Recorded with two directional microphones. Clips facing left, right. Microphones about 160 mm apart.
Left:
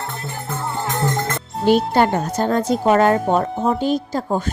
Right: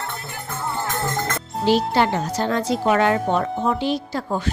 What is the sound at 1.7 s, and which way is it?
A woman's voice, 50° left (ahead or behind).